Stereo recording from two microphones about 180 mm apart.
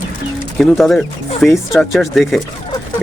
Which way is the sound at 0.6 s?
Centre (ahead or behind).